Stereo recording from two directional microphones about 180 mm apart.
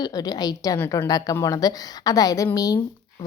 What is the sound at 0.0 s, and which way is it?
Speech, 20° left (ahead or behind).